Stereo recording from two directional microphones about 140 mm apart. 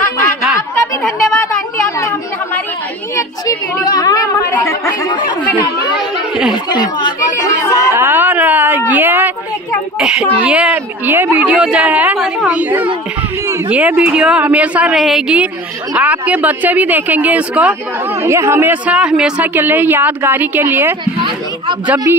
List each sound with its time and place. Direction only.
2.0 s chatter: 20° left (ahead or behind)
3.2 s a woman's voice: 25° left (ahead or behind)
5.0 s a woman's voice: 35° left (ahead or behind)
7.9 s a woman's voice: 15° right (ahead or behind)
21.0 s a sound: 35° right (ahead or behind)